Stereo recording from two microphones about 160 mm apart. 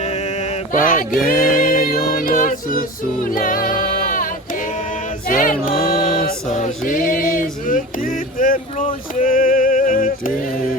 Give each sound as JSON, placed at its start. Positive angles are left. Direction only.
{"t": 0.8, "sound": "music", "side_deg": 60}
{"t": 5.3, "sound": "music", "side_deg": 60}
{"t": 6.5, "sound": "a sound", "side_deg": 50}
{"t": 9.2, "sound": "yodeling", "side_deg": 60}